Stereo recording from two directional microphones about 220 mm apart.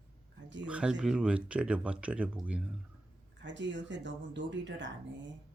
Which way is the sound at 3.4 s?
55° right (ahead or behind).